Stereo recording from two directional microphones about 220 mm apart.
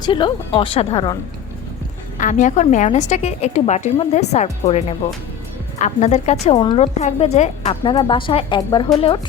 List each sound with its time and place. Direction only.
0.0 s speech: 20° left (ahead or behind)
2.1 s a woman's voice: 35° left (ahead or behind)